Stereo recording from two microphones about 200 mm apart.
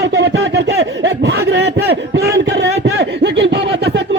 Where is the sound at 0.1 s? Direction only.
60° right (ahead or behind).